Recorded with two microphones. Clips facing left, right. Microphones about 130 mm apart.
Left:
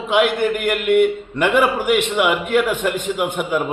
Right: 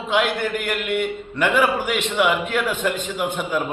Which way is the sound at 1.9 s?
55° left (ahead or behind).